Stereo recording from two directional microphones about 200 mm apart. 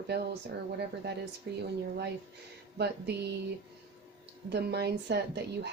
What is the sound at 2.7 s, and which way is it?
Speech, 55° right (ahead or behind).